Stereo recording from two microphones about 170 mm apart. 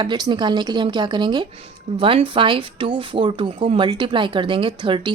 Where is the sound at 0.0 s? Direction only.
25° right (ahead or behind).